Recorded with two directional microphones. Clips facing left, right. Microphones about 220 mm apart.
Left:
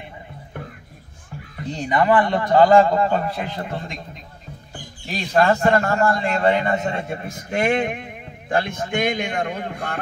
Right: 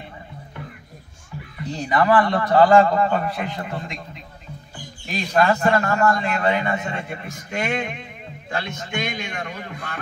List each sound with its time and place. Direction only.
0.5 s a sound: 50° left (ahead or behind)
1.9 s a man's voice: 25° left (ahead or behind)
5.0 s a man's voice: 35° left (ahead or behind); by 9.9 s 55° left (ahead or behind)